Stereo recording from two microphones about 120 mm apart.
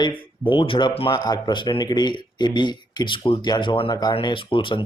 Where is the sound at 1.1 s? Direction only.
35° left (ahead or behind).